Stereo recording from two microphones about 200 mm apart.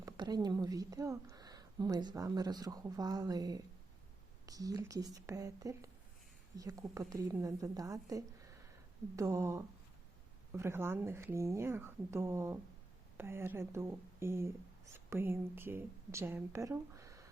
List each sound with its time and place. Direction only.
0.0 s a woman's voice: 20° right (ahead or behind)